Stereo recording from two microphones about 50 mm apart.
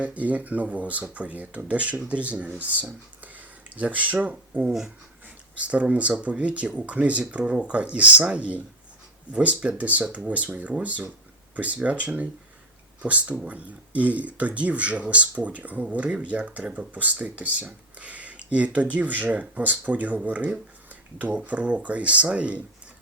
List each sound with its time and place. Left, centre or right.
0.0 s speech: right
3.2 s a sound: right
5.5 s speech: right